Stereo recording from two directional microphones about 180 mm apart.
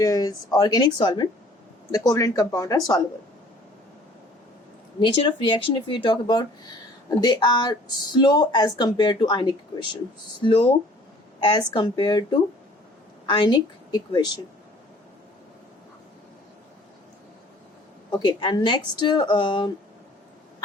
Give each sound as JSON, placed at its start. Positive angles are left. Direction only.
{"t": 0.0, "sound": "speech", "side_deg": 20}
{"t": 4.9, "sound": "speech", "side_deg": 25}
{"t": 18.1, "sound": "speech", "side_deg": 25}